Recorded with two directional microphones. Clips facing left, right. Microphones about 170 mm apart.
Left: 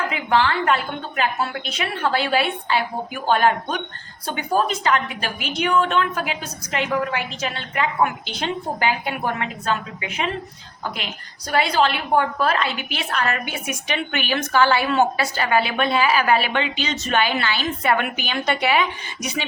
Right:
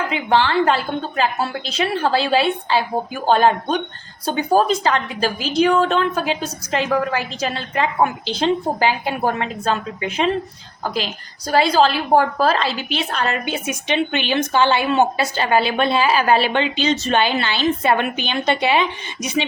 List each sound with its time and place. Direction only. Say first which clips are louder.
0.1 s a woman's voice: right 3 dB; 30° right (ahead or behind)